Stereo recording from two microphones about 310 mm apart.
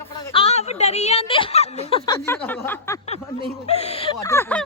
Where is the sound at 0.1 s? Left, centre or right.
Centre.